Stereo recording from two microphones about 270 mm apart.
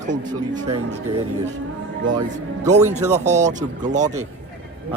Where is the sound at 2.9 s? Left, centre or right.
Right.